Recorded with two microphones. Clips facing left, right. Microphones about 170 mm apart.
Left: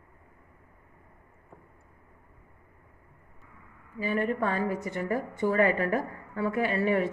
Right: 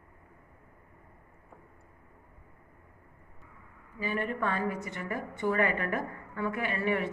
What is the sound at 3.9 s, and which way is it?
A woman's voice, 40° left (ahead or behind).